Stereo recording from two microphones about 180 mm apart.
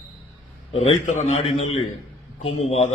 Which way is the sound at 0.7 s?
35° left (ahead or behind).